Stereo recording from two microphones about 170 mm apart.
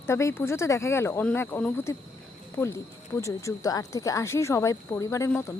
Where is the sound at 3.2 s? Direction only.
20° left (ahead or behind).